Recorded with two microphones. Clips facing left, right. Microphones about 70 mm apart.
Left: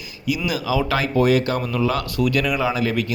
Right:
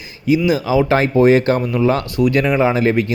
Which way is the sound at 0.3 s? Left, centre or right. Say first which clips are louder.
Right 7 dB; right.